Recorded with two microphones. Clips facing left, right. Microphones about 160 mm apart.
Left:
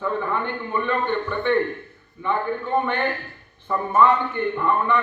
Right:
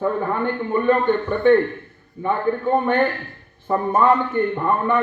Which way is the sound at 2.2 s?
40° right (ahead or behind).